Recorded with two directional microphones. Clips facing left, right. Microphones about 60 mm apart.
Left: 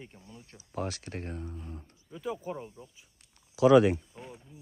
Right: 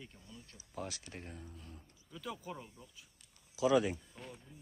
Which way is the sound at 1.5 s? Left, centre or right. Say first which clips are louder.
Left 10 dB; left.